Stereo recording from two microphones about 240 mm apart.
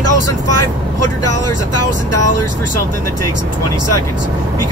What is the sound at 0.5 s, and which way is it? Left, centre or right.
Vehicle, left.